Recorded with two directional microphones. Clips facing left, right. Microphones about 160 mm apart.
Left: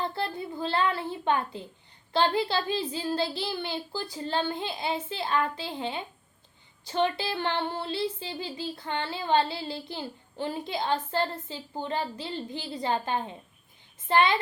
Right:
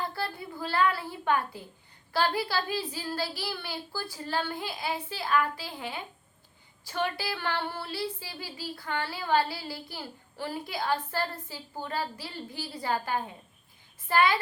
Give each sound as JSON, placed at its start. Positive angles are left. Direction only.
{"t": 0.0, "sound": "a child's voice", "side_deg": 25}
{"t": 2.1, "sound": "child singing", "side_deg": 25}